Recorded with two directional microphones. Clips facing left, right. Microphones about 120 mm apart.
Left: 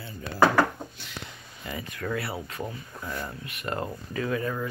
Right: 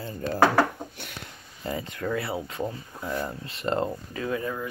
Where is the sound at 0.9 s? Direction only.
55° right (ahead or behind).